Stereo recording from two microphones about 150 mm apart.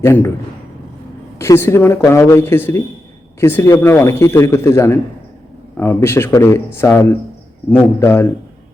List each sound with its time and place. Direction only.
0.0 s speech: 15° left (ahead or behind)
1.4 s speech: 15° left (ahead or behind)